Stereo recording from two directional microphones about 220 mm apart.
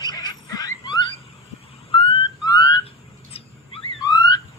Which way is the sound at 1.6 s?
25° left (ahead or behind).